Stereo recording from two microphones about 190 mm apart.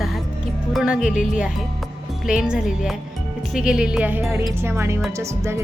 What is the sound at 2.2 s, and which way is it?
Speech, 5° right (ahead or behind).